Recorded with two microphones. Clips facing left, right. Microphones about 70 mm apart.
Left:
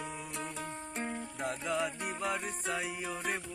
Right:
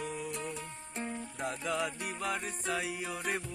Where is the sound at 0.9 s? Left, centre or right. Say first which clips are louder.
Even; left.